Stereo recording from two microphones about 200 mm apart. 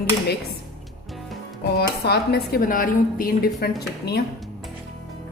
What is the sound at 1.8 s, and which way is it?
A woman's voice, 55° left (ahead or behind).